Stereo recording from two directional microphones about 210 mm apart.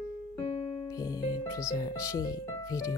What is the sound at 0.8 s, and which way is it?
Speech, 15° left (ahead or behind).